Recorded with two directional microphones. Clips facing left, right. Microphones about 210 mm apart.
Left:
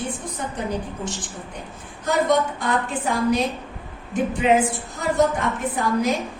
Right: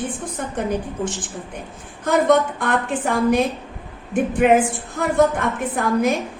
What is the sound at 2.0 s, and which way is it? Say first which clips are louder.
A woman's voice: right 4 dB; 55° right (ahead or behind).